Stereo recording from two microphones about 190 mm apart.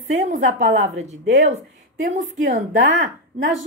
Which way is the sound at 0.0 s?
40° right (ahead or behind).